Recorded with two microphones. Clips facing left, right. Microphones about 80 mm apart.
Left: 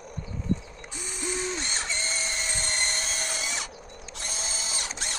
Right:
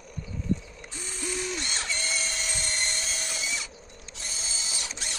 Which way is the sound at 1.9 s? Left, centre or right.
Left.